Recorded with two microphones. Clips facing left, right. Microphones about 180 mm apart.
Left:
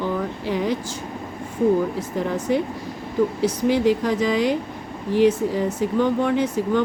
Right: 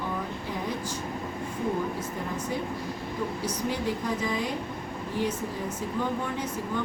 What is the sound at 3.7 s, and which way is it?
Speech, 80° left.